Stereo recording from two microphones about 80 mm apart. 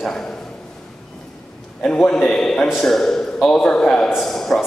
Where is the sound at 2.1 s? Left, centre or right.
Centre.